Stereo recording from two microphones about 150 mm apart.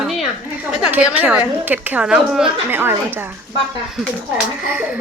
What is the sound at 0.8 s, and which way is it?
A woman's voice, 10° right (ahead or behind).